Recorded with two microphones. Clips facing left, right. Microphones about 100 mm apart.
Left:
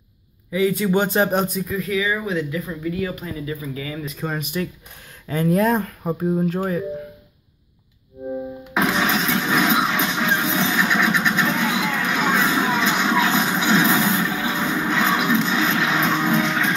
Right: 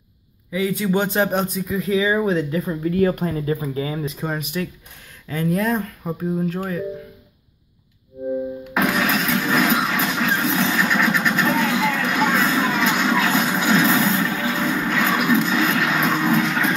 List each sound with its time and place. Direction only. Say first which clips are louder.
0.5 s a man's voice: left 2 dB; centre (ahead or behind)
1.8 s speech: right 5 dB; 25° right (ahead or behind); by 3.6 s 50° right (ahead or behind)
3.6 s speech: right 4 dB; 35° right (ahead or behind)
4.2 s a man's voice: even; 5° right (ahead or behind)
5.3 s speech: left 3 dB; 25° left (ahead or behind)
8.7 s engine starting: even; 20° left (ahead or behind)
10.9 s vehicle: even; 20° left (ahead or behind)
16.4 s music: right 1 dB; 5° right (ahead or behind)